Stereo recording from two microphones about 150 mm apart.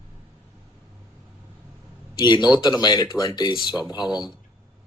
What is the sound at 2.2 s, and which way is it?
Speech, 30° left (ahead or behind).